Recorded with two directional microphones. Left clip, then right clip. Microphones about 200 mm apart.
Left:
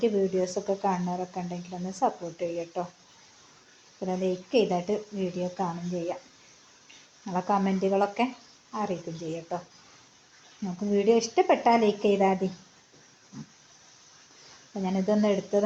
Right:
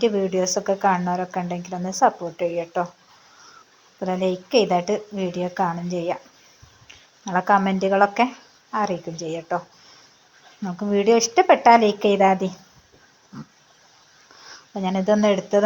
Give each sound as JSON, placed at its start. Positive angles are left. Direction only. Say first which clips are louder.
{"t": 0.0, "sound": "a woman's voice", "louder": "right 5 dB", "side_deg": -15}
{"t": 4.0, "sound": "a woman's voice", "louder": "right 6 dB", "side_deg": -15}
{"t": 7.3, "sound": "a woman's voice", "louder": "right 8 dB", "side_deg": -15}
{"t": 10.9, "sound": "a woman's voice", "louder": "right 6 dB", "side_deg": -15}
{"t": 14.8, "sound": "a woman's voice", "louder": "right 7 dB", "side_deg": -15}